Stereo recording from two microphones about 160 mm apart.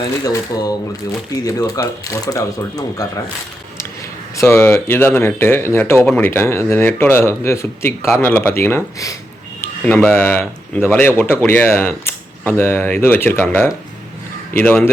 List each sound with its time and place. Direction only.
0.0 s speech: 25° left (ahead or behind)
4.4 s speech: 15° left (ahead or behind)